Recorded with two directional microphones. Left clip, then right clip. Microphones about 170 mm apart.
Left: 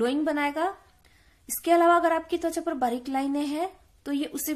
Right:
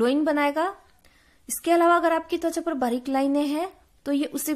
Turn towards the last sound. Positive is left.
turn(degrees=-25)  # may be behind; listen again after turning